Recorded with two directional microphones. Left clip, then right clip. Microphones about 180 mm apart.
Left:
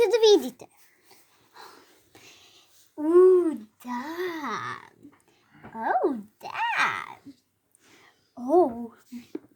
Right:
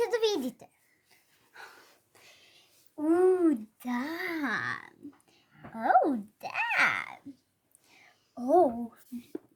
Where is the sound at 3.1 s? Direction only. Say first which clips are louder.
Left 6 dB; 15° left (ahead or behind).